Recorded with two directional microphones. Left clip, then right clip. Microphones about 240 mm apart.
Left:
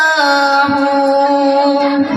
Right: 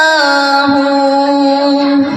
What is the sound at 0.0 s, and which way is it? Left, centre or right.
Music, right.